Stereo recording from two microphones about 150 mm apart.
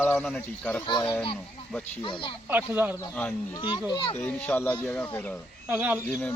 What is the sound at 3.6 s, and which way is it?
Speech, 30° left (ahead or behind).